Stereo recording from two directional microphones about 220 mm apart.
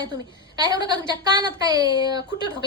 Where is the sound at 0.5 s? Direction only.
20° right (ahead or behind).